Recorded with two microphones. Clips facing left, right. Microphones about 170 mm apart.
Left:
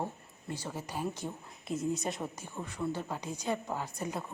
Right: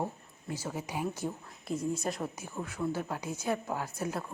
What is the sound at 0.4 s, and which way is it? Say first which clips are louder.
Speech: right 2 dB; 5° right (ahead or behind).